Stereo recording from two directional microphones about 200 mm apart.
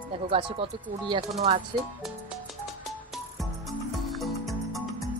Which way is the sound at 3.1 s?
Centre (ahead or behind).